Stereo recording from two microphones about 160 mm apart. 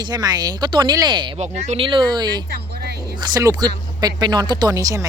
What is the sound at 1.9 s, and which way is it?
Speech, 30° right (ahead or behind).